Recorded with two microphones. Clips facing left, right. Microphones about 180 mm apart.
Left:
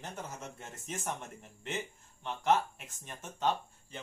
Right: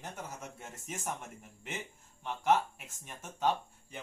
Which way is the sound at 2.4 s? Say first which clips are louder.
Even; 5° right (ahead or behind).